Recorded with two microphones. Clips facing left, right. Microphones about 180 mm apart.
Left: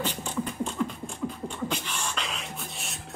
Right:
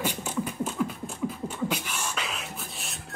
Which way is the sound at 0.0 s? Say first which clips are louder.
Right 1 dB; 10° right (ahead or behind).